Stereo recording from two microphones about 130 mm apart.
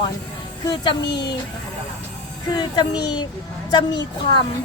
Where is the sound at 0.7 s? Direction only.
35° left (ahead or behind).